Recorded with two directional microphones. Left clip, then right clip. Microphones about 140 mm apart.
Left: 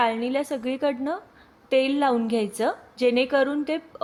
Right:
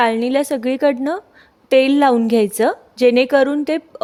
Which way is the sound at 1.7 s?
90° right.